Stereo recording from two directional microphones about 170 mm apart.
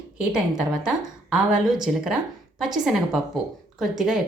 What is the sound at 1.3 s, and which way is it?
Speech, 5° right (ahead or behind).